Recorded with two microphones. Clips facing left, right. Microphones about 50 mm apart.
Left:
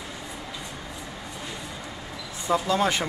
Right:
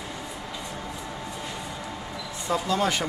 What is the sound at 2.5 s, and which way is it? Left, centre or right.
Speech, centre.